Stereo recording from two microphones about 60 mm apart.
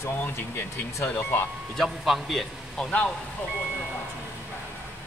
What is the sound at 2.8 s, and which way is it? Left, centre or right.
Speech, left.